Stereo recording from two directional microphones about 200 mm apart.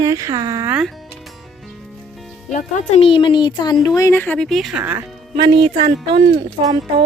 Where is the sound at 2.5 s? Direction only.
35° left (ahead or behind); by 5.0 s 10° right (ahead or behind).